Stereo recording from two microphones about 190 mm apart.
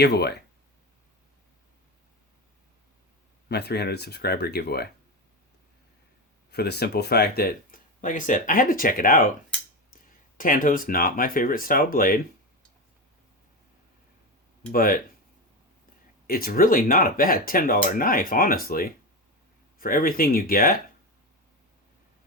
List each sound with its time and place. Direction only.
0.0 s speech: 60° left (ahead or behind)
3.5 s speech: 60° left (ahead or behind)
6.5 s speech: 60° left (ahead or behind)
14.7 s speech: 50° left (ahead or behind)
16.2 s speech: 50° left (ahead or behind)